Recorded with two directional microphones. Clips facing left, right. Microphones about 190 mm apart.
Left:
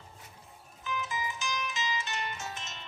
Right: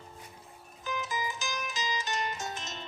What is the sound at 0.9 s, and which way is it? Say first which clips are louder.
Music: right 1 dB; 35° right (ahead or behind).